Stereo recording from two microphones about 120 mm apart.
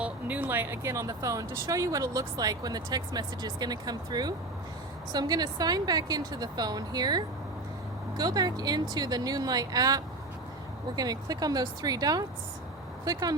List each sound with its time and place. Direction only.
0.0 s speech: 15° right (ahead or behind); by 13.3 s 35° right (ahead or behind)